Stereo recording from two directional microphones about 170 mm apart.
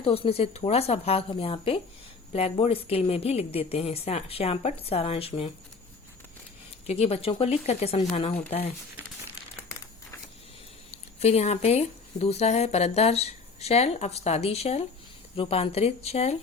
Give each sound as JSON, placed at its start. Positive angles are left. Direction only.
{"t": 0.0, "sound": "speech", "side_deg": 35}
{"t": 6.8, "sound": "speech", "side_deg": 40}
{"t": 11.2, "sound": "speech", "side_deg": 40}